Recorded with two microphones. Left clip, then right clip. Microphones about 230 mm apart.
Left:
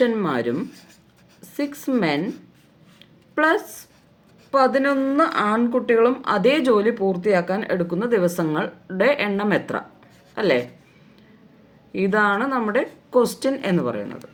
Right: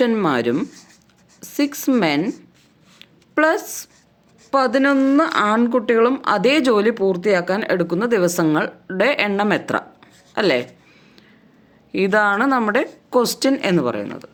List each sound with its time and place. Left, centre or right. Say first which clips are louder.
0.0 s a woman's voice: right 3 dB; right
3.0 s a sound: right 3 dB; right
4.5 s speech: right 2 dB; right
11.9 s speech: right 3 dB; right